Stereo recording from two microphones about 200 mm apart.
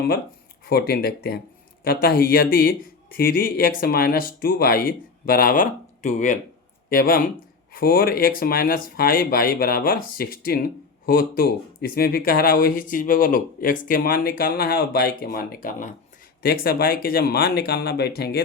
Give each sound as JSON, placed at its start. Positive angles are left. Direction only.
{"t": 0.6, "sound": "speech", "side_deg": 50}